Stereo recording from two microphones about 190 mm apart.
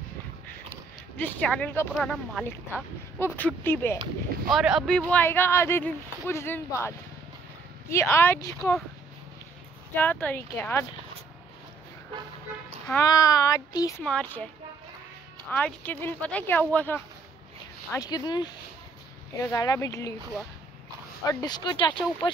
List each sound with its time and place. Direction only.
1.1 s speech: 10° left (ahead or behind)
4.5 s speech: centre (ahead or behind)
7.9 s speech: 15° left (ahead or behind)
9.9 s speech: 10° left (ahead or behind)
13.0 s speech: 20° left (ahead or behind)
14.0 s speech: 10° left (ahead or behind)
15.5 s speech: 10° left (ahead or behind)
21.2 s speech: 20° left (ahead or behind)